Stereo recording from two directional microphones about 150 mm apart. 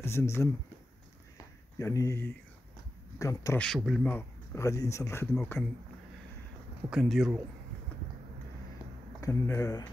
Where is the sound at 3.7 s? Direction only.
Centre (ahead or behind).